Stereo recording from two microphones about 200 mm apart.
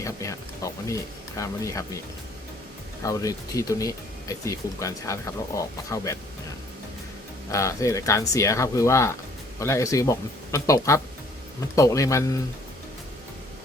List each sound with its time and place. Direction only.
0.0 s speech: 15° left (ahead or behind)
3.0 s speech: 15° left (ahead or behind)
7.5 s speech: 15° left (ahead or behind)